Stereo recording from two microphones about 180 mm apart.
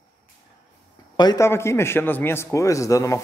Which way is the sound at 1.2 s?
20° left (ahead or behind).